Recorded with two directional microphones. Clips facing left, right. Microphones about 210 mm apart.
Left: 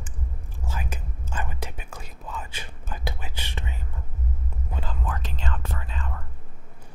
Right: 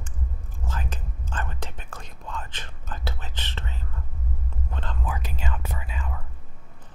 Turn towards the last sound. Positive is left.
turn(degrees=-10)  # may be behind; listen again after turning